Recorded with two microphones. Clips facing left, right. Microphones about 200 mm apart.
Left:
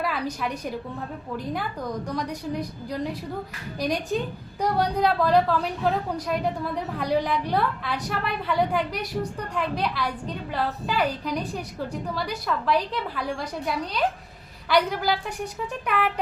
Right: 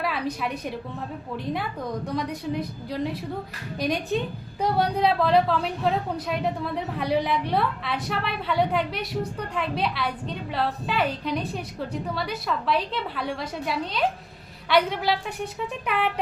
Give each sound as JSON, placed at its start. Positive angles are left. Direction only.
{"t": 0.4, "sound": "a woman's voice", "side_deg": -5}